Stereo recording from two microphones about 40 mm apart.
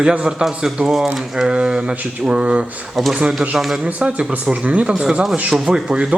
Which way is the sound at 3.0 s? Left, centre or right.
Centre.